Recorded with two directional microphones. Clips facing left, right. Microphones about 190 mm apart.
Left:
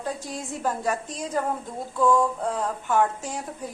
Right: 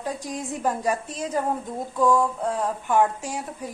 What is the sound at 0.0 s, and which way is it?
A woman's voice, 15° right (ahead or behind).